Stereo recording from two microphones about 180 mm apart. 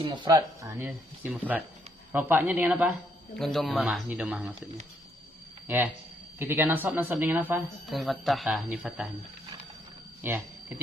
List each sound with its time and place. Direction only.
0.0 s speech: 25° right (ahead or behind); by 2.9 s 10° right (ahead or behind)
3.3 s speech: centre (ahead or behind)
5.6 s speech: 10° right (ahead or behind)
10.2 s speech: 10° right (ahead or behind)